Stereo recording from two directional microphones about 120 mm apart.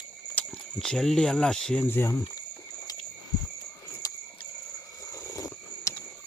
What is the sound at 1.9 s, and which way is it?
Speech, 20° left (ahead or behind).